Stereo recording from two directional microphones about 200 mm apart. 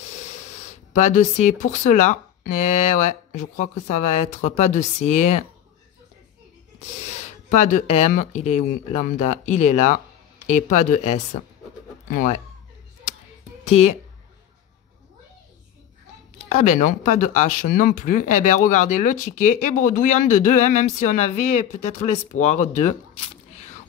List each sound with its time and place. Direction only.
0.0 s speech: 35° left (ahead or behind)
7.0 s speech: 35° left (ahead or behind)
13.7 s speech: 35° left (ahead or behind)
16.4 s speech: 35° left (ahead or behind)